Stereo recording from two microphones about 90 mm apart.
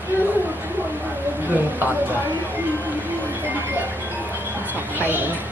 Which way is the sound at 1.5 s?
20° right (ahead or behind).